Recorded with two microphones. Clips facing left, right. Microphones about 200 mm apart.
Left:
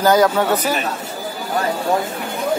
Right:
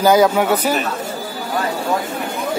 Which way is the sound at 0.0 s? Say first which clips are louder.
Right 1 dB; 10° right (ahead or behind).